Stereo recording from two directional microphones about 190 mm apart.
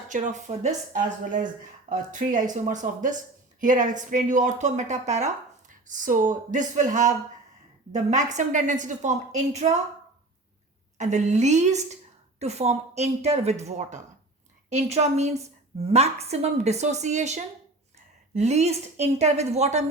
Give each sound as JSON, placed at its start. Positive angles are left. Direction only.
{"t": 0.1, "sound": "speech", "side_deg": -40}
{"t": 10.9, "sound": "speech", "side_deg": -40}